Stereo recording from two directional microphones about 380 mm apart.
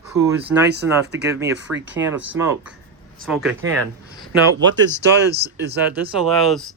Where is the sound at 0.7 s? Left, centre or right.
Right.